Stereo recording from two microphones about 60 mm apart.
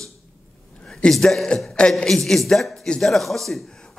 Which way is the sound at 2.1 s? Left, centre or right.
Centre.